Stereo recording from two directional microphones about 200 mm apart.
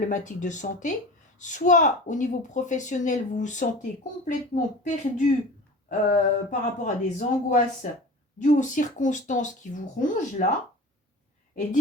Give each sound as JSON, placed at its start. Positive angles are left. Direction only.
{"t": 0.0, "sound": "a woman's voice", "side_deg": 40}